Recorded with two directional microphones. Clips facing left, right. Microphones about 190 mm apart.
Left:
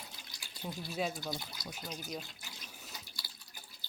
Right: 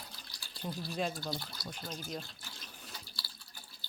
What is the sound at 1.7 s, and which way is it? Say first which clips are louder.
Speech: right 1 dB; 5° left (ahead or behind).